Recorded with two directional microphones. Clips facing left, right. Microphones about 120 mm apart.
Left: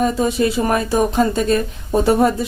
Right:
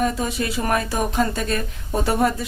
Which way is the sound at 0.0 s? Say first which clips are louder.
Left 6 dB; 25° left (ahead or behind).